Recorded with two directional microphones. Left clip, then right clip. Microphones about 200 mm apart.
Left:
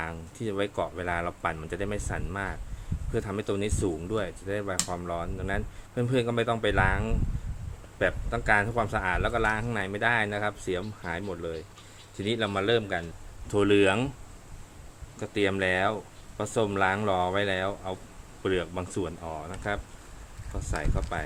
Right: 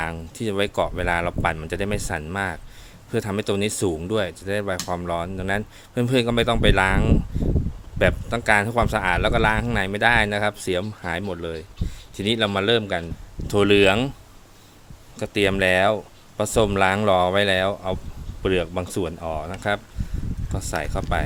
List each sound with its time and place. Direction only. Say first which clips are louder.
0.0 s speech: right 7 dB; 55° right (ahead or behind)
15.2 s speech: right 7 dB; 55° right (ahead or behind)
18.4 s speech: right 6 dB; 45° right (ahead or behind)